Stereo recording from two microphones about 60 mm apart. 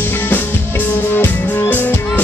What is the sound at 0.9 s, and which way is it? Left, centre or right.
Music, left.